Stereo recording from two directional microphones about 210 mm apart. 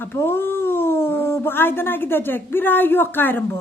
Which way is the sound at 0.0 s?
10° left (ahead or behind).